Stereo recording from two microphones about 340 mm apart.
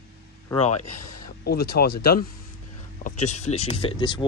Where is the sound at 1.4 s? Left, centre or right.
Left.